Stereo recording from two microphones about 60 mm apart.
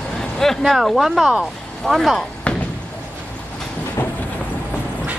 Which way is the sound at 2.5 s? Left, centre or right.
Left.